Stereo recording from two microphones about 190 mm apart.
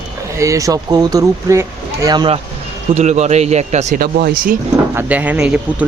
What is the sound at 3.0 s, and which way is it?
Speech, 35° right (ahead or behind).